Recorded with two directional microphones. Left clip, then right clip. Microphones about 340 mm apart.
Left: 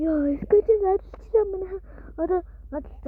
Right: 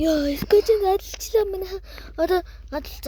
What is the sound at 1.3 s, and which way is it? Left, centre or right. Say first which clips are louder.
Speech: even; centre.